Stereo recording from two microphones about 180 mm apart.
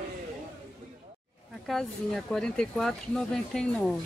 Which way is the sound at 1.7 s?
Centre (ahead or behind).